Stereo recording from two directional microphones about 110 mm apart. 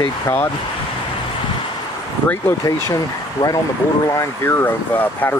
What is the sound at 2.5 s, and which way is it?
Speech, 15° left (ahead or behind).